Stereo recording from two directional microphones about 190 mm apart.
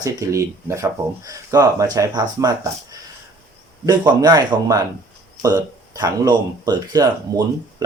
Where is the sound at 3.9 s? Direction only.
20° right (ahead or behind).